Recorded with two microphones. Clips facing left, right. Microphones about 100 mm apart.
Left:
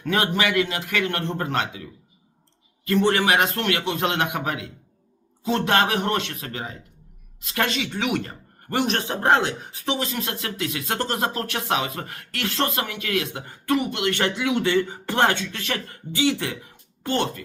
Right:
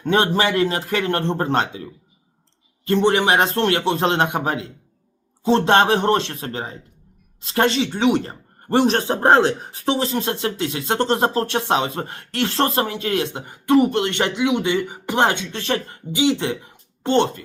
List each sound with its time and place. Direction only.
0.0 s speech: 30° right (ahead or behind)
13.7 s speech: 35° right (ahead or behind)
14.1 s speech: 20° right (ahead or behind)